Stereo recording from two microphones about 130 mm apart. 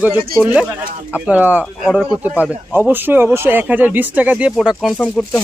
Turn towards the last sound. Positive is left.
turn(degrees=10)  # may be behind; listen again after turning